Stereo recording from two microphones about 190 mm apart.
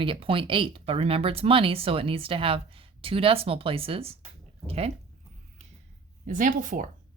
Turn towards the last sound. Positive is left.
turn(degrees=-45)  # may be behind; listen again after turning